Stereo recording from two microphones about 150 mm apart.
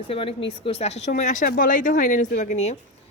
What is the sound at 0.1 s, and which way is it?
Speech, 40° left (ahead or behind).